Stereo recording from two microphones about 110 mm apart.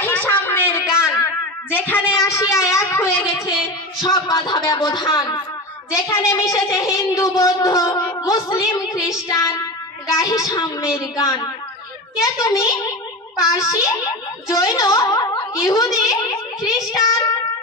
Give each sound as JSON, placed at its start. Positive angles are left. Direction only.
{"t": 0.0, "sound": "a sound", "side_deg": 15}
{"t": 4.0, "sound": "a woman's voice", "side_deg": 40}
{"t": 16.9, "sound": "child singing", "side_deg": 30}